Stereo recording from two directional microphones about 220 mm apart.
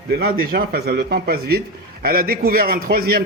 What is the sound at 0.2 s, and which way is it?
A man's voice, 45° right (ahead or behind).